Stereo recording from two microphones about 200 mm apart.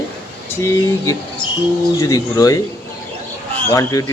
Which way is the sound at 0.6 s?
15° left (ahead or behind).